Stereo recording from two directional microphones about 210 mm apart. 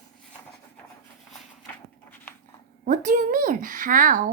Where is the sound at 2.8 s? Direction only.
35° right (ahead or behind).